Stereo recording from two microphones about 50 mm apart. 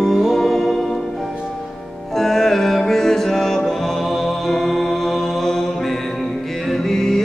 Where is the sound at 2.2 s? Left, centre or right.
Centre.